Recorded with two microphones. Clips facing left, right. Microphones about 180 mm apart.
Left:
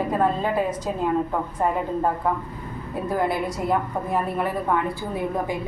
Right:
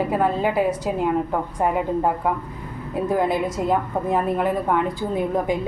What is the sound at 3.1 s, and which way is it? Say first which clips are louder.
A woman's voice: right 2 dB; 20° right (ahead or behind).